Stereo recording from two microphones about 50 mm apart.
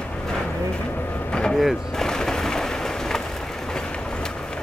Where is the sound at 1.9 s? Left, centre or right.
Centre.